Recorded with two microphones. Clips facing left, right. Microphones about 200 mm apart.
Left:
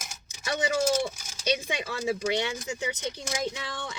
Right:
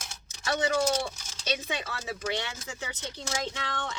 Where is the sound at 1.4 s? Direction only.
15° left (ahead or behind).